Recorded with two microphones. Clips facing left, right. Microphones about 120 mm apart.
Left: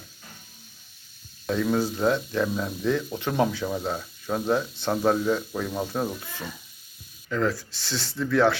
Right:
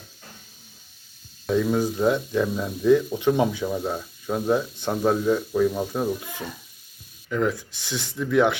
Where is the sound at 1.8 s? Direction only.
15° right (ahead or behind).